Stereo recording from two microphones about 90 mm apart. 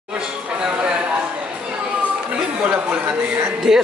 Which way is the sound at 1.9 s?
15° right (ahead or behind).